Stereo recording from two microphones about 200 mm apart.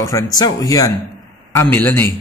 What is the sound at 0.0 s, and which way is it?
A man's voice, 20° left (ahead or behind).